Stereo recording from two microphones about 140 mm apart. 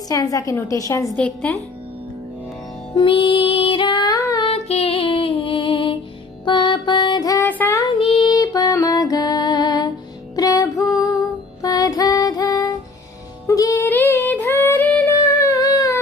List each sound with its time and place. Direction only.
0.1 s a woman's voice: 25° left (ahead or behind)
1.0 s a woman's voice: 10° left (ahead or behind)
2.9 s music: 40° left (ahead or behind)
4.5 s music: 45° left (ahead or behind); by 7.4 s 25° left (ahead or behind)
7.4 s child singing: 10° left (ahead or behind)
8.0 s music: 35° left (ahead or behind); by 15.0 s 10° left (ahead or behind)
15.1 s humming: 25° left (ahead or behind)